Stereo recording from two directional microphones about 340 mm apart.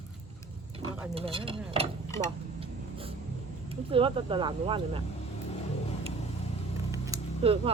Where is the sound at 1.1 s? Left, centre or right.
Centre.